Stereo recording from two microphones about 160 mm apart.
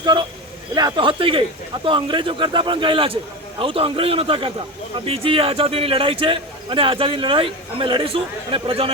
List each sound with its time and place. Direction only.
0.0 s a man's voice: 30° right (ahead or behind)